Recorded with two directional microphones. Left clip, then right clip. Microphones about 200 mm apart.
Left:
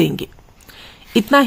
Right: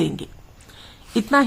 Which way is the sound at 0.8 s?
35° left (ahead or behind).